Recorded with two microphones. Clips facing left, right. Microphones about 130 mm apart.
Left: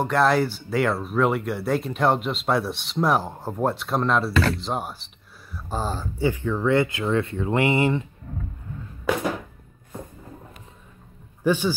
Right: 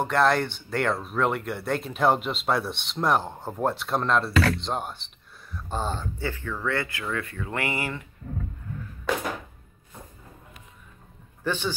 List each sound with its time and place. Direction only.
0.0 s speech: centre (ahead or behind)
6.1 s speech: 15° left (ahead or behind)
11.4 s a man's voice: 10° left (ahead or behind)